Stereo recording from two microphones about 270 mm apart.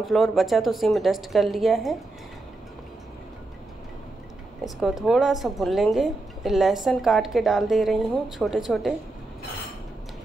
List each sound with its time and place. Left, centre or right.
0.0 s a woman's voice: centre
4.7 s a woman's voice: centre